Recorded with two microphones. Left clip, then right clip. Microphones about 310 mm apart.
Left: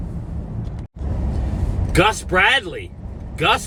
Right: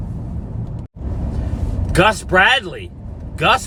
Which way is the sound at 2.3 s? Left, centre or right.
Centre.